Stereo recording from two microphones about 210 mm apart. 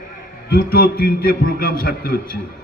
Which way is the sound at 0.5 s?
45° left (ahead or behind).